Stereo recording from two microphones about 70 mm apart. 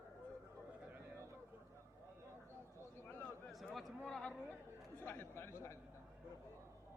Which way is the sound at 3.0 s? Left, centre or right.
Left.